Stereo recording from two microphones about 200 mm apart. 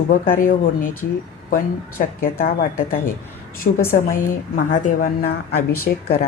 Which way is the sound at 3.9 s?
45° left (ahead or behind).